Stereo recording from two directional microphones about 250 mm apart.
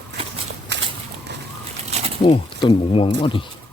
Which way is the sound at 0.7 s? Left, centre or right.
Right.